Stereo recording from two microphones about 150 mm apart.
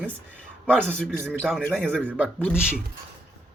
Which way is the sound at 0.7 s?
5° left (ahead or behind).